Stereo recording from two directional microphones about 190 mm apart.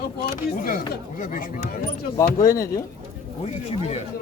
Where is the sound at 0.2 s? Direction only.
50° left (ahead or behind).